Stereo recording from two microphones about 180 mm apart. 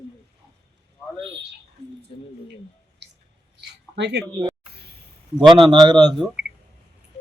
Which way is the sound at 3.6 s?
75° right (ahead or behind).